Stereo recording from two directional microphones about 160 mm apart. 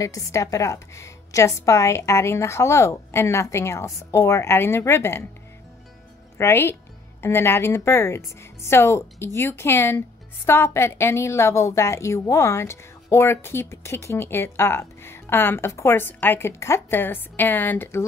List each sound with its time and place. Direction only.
0.0 s speech: 20° left (ahead or behind)
6.3 s speech: 15° left (ahead or behind)